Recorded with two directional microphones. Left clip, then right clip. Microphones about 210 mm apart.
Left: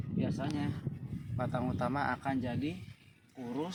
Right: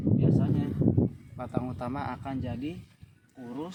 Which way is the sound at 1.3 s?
10° right (ahead or behind).